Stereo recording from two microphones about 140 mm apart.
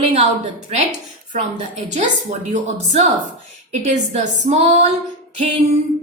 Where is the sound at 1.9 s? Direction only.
55° right (ahead or behind).